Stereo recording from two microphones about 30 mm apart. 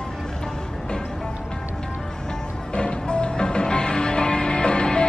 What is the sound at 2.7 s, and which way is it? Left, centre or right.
Music, left.